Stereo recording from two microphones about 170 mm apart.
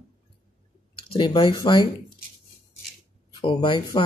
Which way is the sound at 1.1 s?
25° left (ahead or behind).